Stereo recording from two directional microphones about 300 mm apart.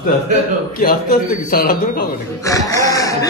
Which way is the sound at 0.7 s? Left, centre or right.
Left.